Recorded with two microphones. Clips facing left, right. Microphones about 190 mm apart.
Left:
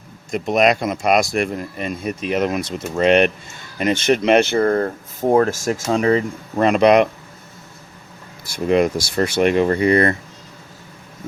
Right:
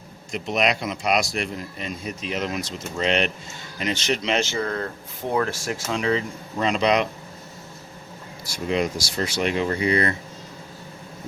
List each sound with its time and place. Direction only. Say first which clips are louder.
0.3 s speech: left 7 dB; 50° left (ahead or behind)
8.4 s speech: left 8 dB; 55° left (ahead or behind)